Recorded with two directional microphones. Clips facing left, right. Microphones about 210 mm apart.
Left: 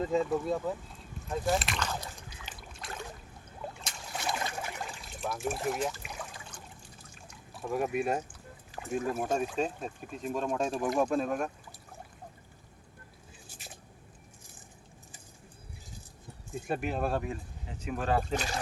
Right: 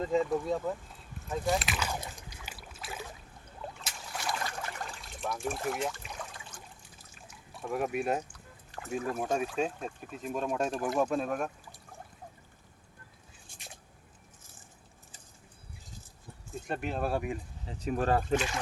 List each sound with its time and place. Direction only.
0.1 s speech: centre (ahead or behind)
1.3 s rowboat: centre (ahead or behind)
4.2 s a sound: 20° left (ahead or behind)
4.5 s trickle: 10° left (ahead or behind)
7.0 s drip: centre (ahead or behind)
9.6 s speech: 5° right (ahead or behind)
13.5 s a sound: 5° left (ahead or behind)
16.6 s speech: 5° left (ahead or behind)
17.1 s speech: 15° right (ahead or behind)
17.7 s speech: 35° right (ahead or behind)
18.3 s speech: 40° left (ahead or behind)